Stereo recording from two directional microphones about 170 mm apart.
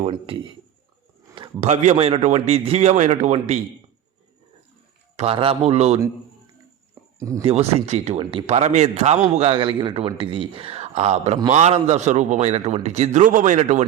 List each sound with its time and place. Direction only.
0.0 s a man's voice: 30° right (ahead or behind)
1.6 s a man's voice: 45° right (ahead or behind)
5.1 s a man's voice: 35° right (ahead or behind)
7.2 s speech: 20° right (ahead or behind)
7.4 s a man's voice: 35° right (ahead or behind)
8.4 s a man's voice: 40° right (ahead or behind)